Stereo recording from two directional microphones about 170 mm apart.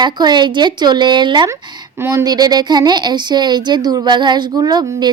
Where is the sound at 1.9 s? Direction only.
15° right (ahead or behind).